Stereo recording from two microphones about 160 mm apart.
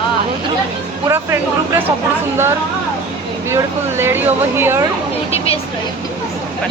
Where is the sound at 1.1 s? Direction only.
15° right (ahead or behind).